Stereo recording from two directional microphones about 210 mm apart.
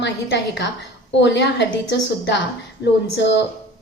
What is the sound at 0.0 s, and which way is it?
A woman's voice, 55° left (ahead or behind).